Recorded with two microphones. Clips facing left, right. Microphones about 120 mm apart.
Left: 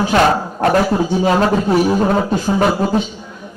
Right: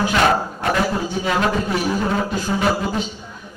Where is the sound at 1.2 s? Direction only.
35° left (ahead or behind).